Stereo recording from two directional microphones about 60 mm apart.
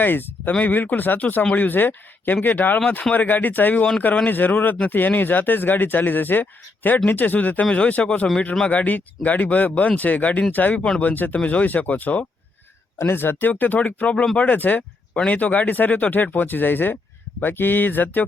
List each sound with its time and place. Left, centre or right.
0.0 s speech: left
13.0 s speech: left